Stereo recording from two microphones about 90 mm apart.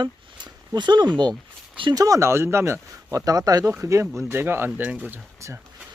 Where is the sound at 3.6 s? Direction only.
30° right (ahead or behind).